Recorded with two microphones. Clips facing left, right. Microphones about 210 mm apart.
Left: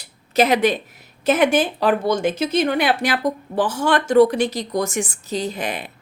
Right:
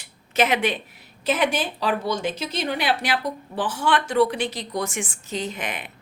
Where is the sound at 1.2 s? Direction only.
50° left (ahead or behind).